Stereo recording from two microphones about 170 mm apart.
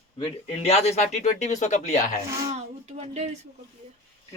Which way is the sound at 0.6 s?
40° left (ahead or behind).